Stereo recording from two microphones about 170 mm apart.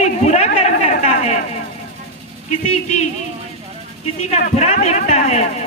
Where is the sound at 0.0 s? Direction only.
40° left (ahead or behind).